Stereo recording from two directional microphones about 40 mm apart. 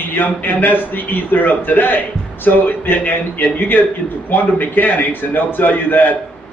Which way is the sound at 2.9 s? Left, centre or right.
Left.